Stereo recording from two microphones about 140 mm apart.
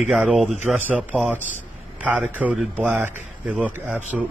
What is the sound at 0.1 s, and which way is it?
Speech, 5° right (ahead or behind).